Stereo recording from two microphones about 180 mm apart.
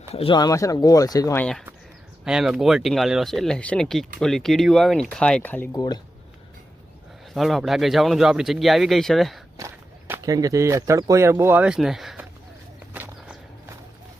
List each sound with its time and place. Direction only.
0.1 s speech: 30° left (ahead or behind)
2.2 s speech: 5° right (ahead or behind)
5.7 s speech: 20° left (ahead or behind)
7.3 s speech: centre (ahead or behind)
9.6 s speech: 15° right (ahead or behind); by 12.2 s centre (ahead or behind)
12.9 s a sound: 10° right (ahead or behind)